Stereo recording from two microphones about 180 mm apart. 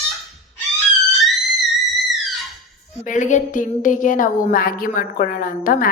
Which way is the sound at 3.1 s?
45° left (ahead or behind).